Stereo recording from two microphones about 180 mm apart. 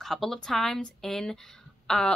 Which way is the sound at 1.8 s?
5° left (ahead or behind).